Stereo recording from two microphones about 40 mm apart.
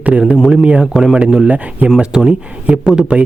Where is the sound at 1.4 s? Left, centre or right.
Right.